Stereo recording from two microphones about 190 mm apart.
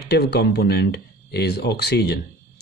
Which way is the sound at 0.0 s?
60° left (ahead or behind).